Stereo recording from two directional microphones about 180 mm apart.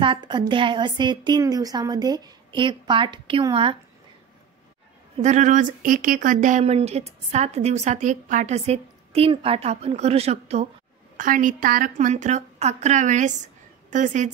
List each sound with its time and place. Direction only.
0.0 s a woman's voice: 25° right (ahead or behind)
5.1 s speech: 40° right (ahead or behind)
11.1 s a woman's voice: 45° right (ahead or behind)